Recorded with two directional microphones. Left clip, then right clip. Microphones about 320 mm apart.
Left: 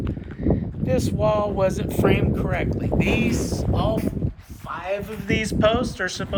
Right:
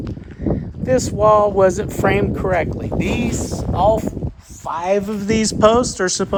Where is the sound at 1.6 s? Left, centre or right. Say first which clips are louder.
Right 5 dB; right.